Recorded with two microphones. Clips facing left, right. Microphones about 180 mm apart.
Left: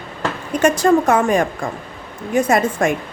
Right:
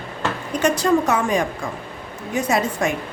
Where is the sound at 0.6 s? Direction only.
50° left (ahead or behind).